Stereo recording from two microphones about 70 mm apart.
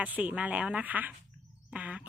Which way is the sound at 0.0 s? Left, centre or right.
Right.